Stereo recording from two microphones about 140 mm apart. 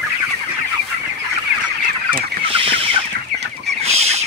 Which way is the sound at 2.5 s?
40° right (ahead or behind).